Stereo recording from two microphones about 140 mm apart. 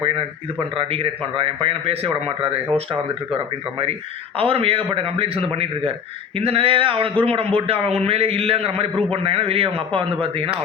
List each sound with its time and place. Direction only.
0.8 s a man's voice: 40° right (ahead or behind)